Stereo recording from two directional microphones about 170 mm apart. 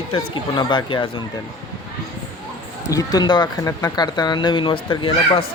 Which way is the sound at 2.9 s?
20° left (ahead or behind).